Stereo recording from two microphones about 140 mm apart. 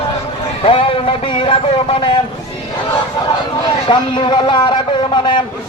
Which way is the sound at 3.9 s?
35° left (ahead or behind).